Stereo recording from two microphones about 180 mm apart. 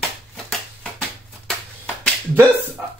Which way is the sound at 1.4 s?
5° left (ahead or behind).